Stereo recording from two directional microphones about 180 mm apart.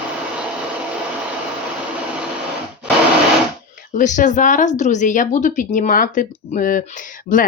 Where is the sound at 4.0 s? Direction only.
45° left (ahead or behind).